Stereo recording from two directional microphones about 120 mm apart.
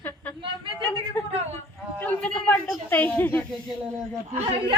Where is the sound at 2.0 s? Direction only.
10° left (ahead or behind).